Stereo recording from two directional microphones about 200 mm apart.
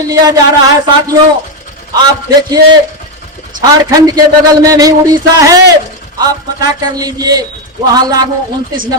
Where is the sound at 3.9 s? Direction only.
20° right (ahead or behind).